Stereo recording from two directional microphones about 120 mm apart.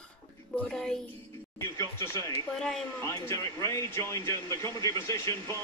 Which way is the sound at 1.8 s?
30° left (ahead or behind).